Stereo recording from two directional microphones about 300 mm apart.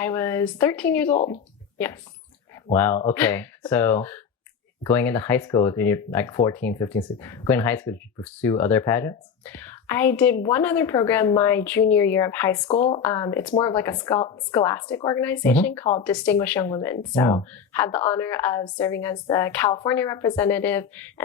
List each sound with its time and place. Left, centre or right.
0.0 s speech: centre
1.1 s a woman's voice: left
2.7 s speech: centre